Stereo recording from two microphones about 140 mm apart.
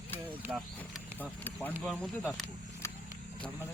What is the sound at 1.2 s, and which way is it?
Speech, 15° left (ahead or behind).